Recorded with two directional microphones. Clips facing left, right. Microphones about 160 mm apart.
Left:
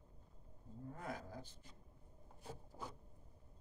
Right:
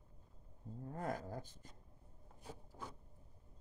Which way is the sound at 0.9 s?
50° right (ahead or behind).